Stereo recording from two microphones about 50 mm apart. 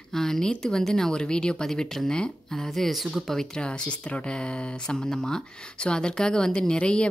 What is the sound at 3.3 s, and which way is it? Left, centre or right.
A woman's voice, centre.